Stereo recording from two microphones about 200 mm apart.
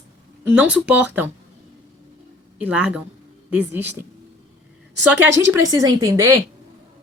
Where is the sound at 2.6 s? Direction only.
5° right (ahead or behind).